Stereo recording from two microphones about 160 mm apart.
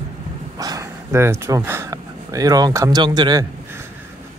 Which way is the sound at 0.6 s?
20° right (ahead or behind).